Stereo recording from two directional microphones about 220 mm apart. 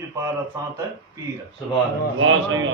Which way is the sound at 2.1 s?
60° right (ahead or behind).